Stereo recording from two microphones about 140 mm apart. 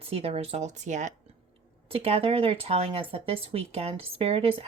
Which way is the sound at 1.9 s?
45° right (ahead or behind).